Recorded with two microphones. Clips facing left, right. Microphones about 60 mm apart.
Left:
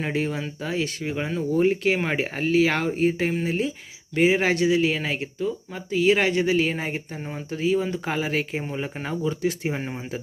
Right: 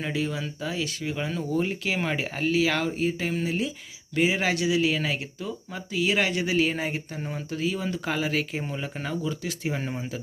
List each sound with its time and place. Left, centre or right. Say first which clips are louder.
0.0 s speech: left 3 dB; left
7.2 s speech: even; centre
7.5 s speech: left 6 dB; left